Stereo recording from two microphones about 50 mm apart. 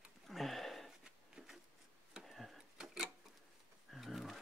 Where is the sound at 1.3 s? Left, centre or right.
Centre.